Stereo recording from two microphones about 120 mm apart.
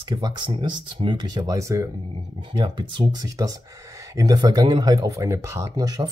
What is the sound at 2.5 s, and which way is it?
Speech, 40° right (ahead or behind).